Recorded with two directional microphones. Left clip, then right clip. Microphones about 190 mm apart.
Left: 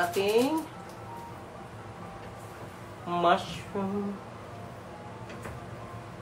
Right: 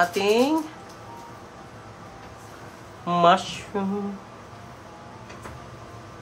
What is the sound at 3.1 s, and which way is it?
Speech, 50° right (ahead or behind).